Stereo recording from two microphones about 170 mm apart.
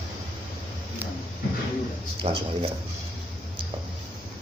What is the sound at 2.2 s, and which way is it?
Speech, 35° right (ahead or behind).